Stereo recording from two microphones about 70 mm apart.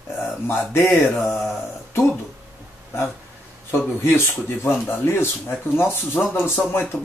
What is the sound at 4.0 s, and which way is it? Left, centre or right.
Speech, left.